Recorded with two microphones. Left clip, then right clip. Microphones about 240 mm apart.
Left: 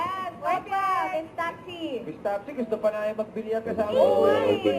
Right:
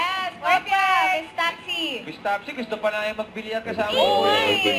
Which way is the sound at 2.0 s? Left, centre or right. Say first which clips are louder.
Right 4 dB; centre.